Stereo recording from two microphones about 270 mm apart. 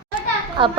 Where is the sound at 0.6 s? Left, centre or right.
Centre.